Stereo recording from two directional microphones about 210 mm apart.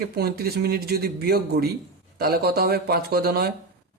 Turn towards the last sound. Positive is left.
turn(degrees=-50)  # may be behind; listen again after turning